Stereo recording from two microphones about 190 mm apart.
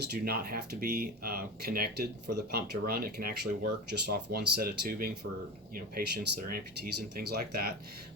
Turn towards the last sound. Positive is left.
turn(degrees=-55)  # may be behind; listen again after turning